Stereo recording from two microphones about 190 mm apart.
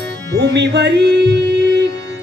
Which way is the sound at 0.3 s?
65° right (ahead or behind).